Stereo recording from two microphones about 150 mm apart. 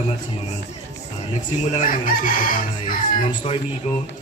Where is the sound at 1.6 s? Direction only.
55° left (ahead or behind).